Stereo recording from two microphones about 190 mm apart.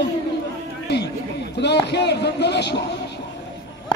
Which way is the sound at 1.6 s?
65° left (ahead or behind).